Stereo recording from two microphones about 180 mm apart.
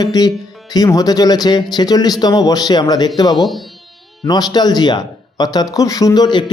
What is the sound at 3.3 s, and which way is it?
Speech, centre (ahead or behind).